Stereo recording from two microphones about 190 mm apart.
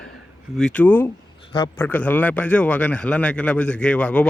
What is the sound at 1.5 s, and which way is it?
Speech, 20° left (ahead or behind).